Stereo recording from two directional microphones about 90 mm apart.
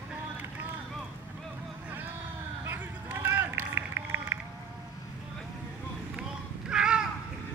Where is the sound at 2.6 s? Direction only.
25° right (ahead or behind).